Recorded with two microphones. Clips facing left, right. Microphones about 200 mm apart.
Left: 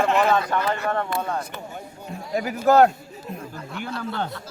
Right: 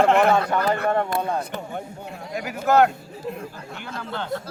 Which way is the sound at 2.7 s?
35° left (ahead or behind).